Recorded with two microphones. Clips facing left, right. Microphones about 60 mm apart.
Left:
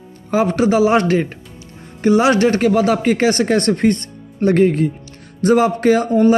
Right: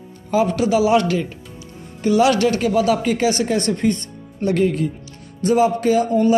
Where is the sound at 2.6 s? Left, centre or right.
Left.